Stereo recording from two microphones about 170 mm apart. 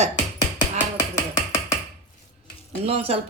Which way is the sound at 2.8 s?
35° right (ahead or behind).